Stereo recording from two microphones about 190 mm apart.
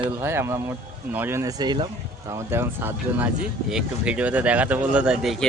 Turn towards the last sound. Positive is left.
turn(degrees=-5)  # may be behind; listen again after turning